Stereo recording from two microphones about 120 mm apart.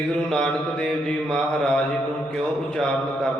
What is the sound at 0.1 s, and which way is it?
Mantra, 5° left (ahead or behind).